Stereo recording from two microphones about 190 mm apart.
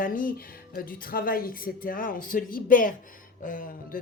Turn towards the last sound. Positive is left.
turn(degrees=45)  # may be behind; listen again after turning